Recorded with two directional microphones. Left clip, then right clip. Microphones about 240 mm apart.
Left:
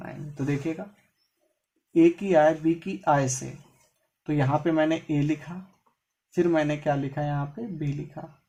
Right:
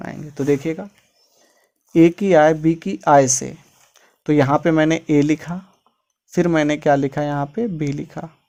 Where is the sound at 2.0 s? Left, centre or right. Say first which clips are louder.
Right 7 dB; right.